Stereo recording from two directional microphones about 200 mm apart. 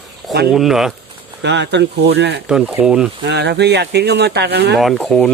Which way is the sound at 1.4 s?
60° right (ahead or behind).